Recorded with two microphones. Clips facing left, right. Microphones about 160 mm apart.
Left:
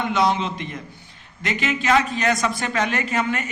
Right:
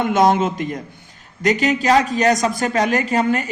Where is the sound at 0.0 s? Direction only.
45° right (ahead or behind).